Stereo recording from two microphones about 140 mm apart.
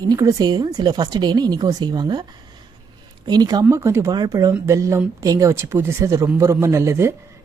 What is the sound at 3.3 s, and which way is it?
Speech, 30° right (ahead or behind).